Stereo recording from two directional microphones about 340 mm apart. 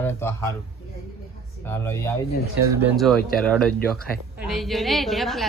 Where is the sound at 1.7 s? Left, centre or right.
Centre.